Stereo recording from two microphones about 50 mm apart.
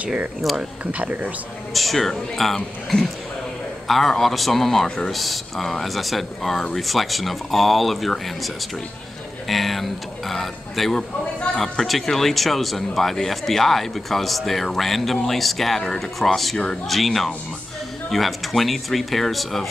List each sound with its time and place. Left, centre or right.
0.6 s speech: right
1.7 s speech: centre
4.8 s speech: centre
5.1 s speech: centre
9.5 s speech: centre